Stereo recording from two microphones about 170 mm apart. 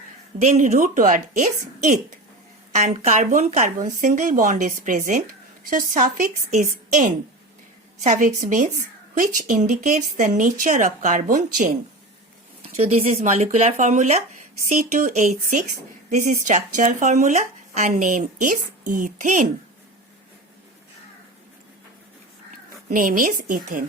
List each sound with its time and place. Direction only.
0.3 s speech: 40° right (ahead or behind)
12.6 s speech: 35° right (ahead or behind)
22.9 s speech: 55° right (ahead or behind)